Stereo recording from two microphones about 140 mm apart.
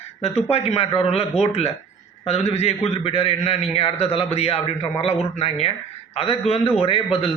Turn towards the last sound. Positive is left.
turn(degrees=45)  # may be behind; listen again after turning